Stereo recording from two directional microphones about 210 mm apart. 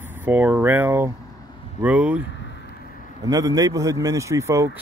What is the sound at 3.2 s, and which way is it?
Speech, 15° right (ahead or behind).